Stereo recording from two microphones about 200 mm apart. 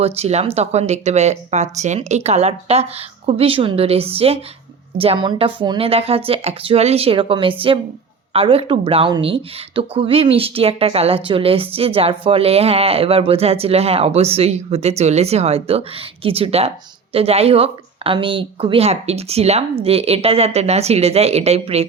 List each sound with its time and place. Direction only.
0.0 s speech: 30° right (ahead or behind)